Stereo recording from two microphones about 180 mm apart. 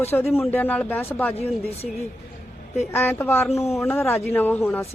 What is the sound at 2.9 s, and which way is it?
Speech, 10° left (ahead or behind).